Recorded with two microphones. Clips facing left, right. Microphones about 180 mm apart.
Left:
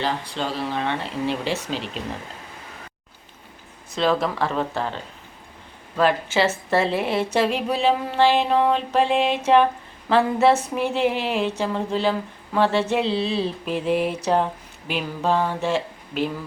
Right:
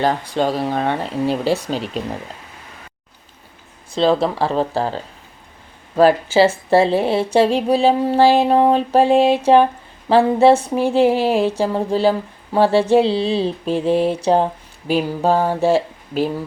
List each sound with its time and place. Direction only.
0.0 s a woman's voice: 50° right (ahead or behind)
3.9 s a woman's voice: 30° right (ahead or behind)
6.0 s a woman's voice: 35° right (ahead or behind)